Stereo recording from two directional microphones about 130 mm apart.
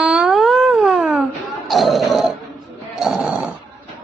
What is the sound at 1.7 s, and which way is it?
Speech, centre (ahead or behind).